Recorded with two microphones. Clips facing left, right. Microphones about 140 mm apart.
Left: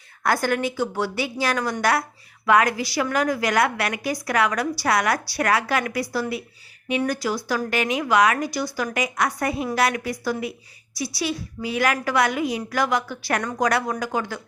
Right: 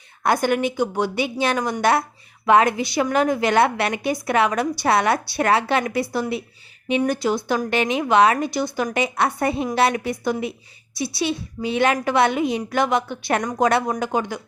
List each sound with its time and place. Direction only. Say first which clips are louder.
0.2 s a woman's voice: right 3 dB; 20° right (ahead or behind)